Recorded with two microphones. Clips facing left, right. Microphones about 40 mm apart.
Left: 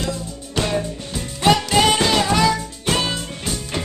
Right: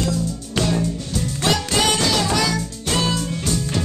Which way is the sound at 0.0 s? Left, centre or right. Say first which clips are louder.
Right 3 dB; left.